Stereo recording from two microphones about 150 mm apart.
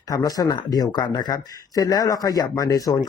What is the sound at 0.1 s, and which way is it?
Speech, 25° left (ahead or behind).